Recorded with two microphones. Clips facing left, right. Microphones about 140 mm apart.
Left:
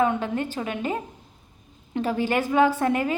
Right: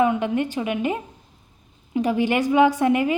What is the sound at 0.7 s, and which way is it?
Speech, 15° right (ahead or behind).